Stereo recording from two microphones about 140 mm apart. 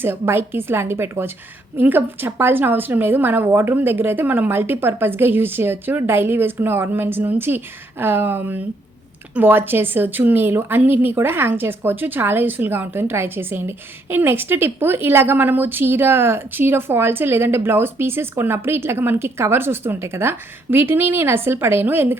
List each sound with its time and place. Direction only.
0.0 s a woman's voice: 15° right (ahead or behind)